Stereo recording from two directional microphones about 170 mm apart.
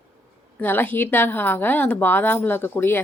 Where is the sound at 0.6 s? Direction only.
10° left (ahead or behind).